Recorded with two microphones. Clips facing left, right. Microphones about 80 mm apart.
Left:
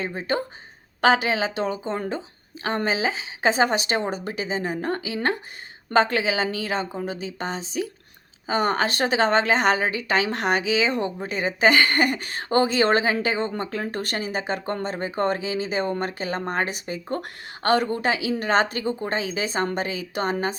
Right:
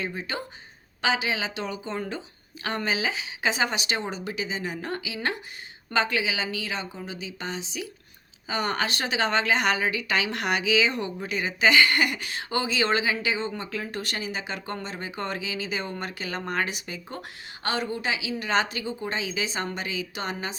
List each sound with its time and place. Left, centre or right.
0.0 s a woman's voice: left
17.2 s speech: left